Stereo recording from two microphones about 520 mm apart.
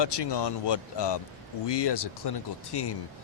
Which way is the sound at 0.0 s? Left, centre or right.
Left.